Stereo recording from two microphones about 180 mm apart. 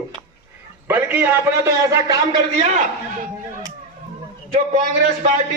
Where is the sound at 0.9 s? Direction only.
10° right (ahead or behind).